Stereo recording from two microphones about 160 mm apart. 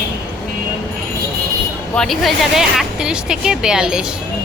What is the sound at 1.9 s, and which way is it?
Speech, centre (ahead or behind).